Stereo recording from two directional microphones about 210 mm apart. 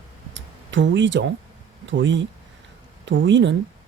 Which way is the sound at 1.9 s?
60° right (ahead or behind).